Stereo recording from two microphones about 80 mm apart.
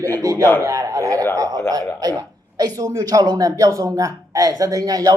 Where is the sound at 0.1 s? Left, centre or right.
Right.